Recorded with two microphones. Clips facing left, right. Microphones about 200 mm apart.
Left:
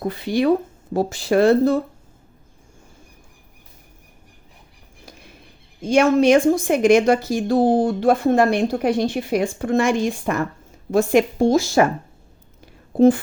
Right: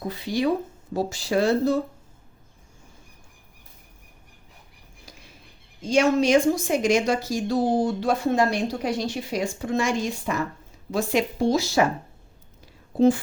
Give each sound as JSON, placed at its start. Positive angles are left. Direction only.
{"t": 0.0, "sound": "a woman's voice", "side_deg": 60}
{"t": 5.8, "sound": "a woman's voice", "side_deg": 55}
{"t": 12.6, "sound": "a sound", "side_deg": 55}